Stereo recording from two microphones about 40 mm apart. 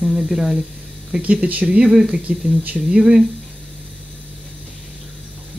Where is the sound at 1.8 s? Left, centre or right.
Centre.